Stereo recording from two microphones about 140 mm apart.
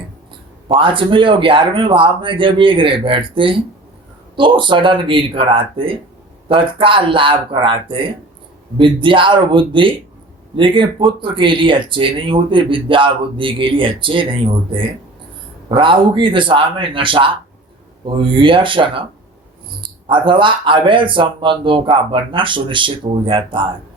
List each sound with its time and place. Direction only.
0.7 s speech: 35° right (ahead or behind)